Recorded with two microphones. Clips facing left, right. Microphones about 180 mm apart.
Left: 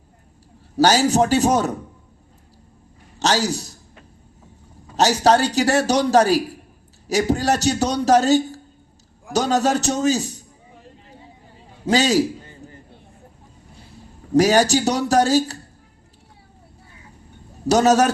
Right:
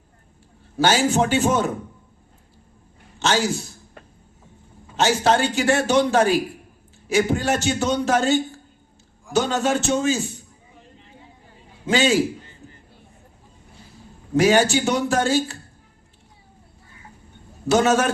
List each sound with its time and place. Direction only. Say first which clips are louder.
0.8 s a man's voice: left 3 dB; 40° left (ahead or behind)
3.2 s a man's voice: left 1 dB; 40° left (ahead or behind)
4.9 s a man's voice: left 3 dB; 40° left (ahead or behind)
11.9 s a man's voice: left 1 dB; 40° left (ahead or behind)
14.3 s a man's voice: left 2 dB; 40° left (ahead or behind)
17.7 s a man's voice: left 3 dB; 40° left (ahead or behind)